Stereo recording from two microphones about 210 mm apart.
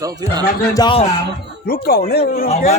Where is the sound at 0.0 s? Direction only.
20° right (ahead or behind).